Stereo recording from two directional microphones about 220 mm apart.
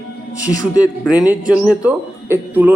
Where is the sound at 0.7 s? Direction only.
5° right (ahead or behind).